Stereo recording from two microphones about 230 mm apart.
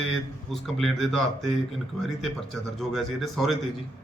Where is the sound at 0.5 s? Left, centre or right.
Centre.